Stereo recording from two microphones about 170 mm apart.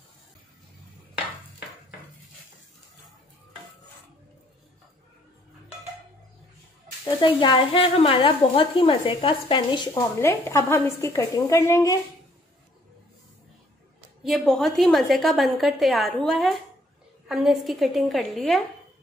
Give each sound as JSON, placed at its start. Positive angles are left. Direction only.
{"t": 7.2, "sound": "speech", "side_deg": 30}
{"t": 10.2, "sound": "a woman's voice", "side_deg": 15}
{"t": 14.2, "sound": "a woman's voice", "side_deg": 0}